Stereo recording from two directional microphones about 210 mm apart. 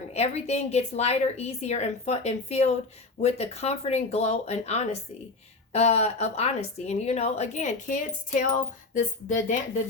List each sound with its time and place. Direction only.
0.1 s speech: 30° left (ahead or behind)